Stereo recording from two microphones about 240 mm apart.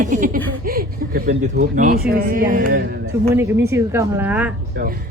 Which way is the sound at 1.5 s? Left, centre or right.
Right.